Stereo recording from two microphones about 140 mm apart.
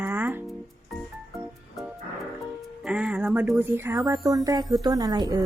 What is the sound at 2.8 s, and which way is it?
Speech, 5° right (ahead or behind).